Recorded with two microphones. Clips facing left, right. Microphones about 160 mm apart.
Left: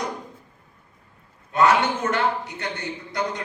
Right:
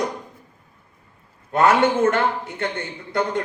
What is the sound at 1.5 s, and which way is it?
A man's voice, 50° right (ahead or behind).